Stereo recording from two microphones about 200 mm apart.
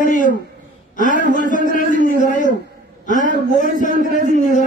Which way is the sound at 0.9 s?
40° left (ahead or behind).